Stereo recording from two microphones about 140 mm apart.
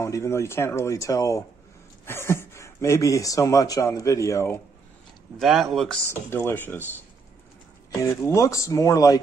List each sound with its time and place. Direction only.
0.0 s speech: 20° left (ahead or behind)
5.4 s speech: centre (ahead or behind)
6.0 s speech: 15° left (ahead or behind)
7.9 s speech: 20° left (ahead or behind)